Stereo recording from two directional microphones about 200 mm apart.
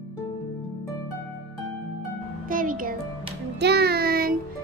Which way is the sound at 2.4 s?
45° right (ahead or behind).